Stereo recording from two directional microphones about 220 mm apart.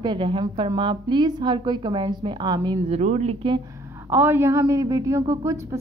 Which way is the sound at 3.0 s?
30° right (ahead or behind).